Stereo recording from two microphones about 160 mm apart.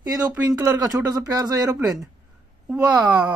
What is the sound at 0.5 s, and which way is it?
Speech, 20° right (ahead or behind).